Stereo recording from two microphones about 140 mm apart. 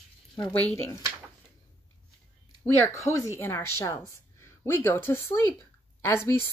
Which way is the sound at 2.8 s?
20° left (ahead or behind).